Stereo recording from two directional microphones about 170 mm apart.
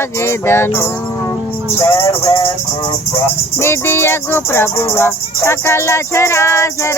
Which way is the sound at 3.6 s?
15° left (ahead or behind).